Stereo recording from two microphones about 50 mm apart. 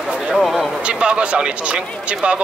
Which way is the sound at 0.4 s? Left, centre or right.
Centre.